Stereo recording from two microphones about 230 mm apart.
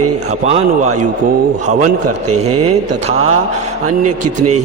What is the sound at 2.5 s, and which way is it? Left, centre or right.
Speech, right.